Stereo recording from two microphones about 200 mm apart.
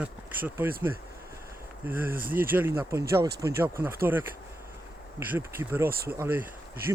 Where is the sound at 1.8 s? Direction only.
10° right (ahead or behind).